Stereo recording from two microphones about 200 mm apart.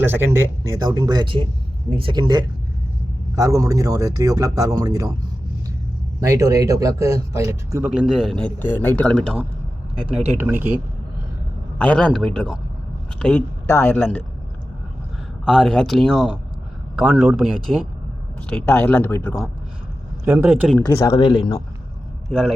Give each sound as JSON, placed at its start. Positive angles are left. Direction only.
{"t": 0.0, "sound": "speech", "side_deg": -10}
{"t": 6.1, "sound": "a man's voice", "side_deg": -15}
{"t": 10.3, "sound": "speech", "side_deg": -10}
{"t": 11.8, "sound": "a man's voice", "side_deg": 5}
{"t": 15.4, "sound": "a man's voice", "side_deg": 0}
{"t": 20.2, "sound": "a man's voice", "side_deg": -5}
{"t": 20.8, "sound": "speech", "side_deg": 15}
{"t": 22.3, "sound": "a man's voice", "side_deg": 0}